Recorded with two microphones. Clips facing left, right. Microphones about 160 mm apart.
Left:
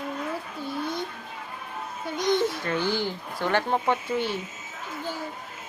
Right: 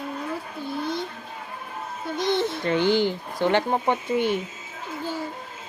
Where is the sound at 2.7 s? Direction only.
20° right (ahead or behind).